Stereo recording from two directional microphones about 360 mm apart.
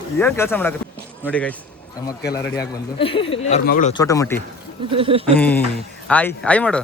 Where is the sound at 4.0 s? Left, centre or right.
Centre.